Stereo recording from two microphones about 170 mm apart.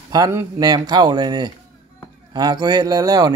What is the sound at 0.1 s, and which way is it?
A man's voice, 20° right (ahead or behind).